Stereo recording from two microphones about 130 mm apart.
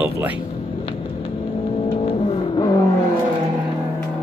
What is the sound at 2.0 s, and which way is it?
Vehicle, 45° left (ahead or behind).